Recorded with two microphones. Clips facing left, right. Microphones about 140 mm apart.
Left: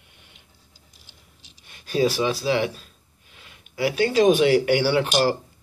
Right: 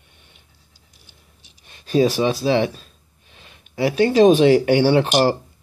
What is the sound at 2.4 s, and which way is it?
Speech, 30° right (ahead or behind).